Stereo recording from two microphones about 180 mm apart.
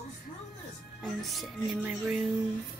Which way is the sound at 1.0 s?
5° right (ahead or behind).